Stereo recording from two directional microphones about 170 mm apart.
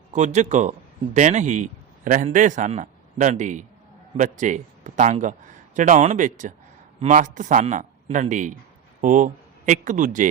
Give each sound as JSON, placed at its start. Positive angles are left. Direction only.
{"t": 0.1, "sound": "a man's voice", "side_deg": -45}